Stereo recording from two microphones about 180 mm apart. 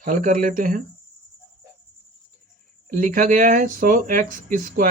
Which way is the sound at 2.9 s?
50° right (ahead or behind).